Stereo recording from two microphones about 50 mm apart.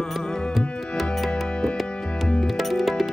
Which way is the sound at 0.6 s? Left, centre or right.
Centre.